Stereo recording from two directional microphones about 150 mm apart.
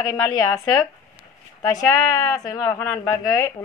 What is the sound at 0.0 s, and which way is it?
A woman's voice, 20° left (ahead or behind).